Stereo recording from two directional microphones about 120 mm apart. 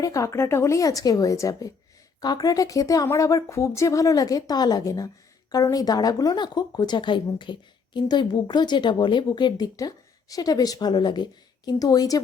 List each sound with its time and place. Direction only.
0.0 s speech: 25° left (ahead or behind)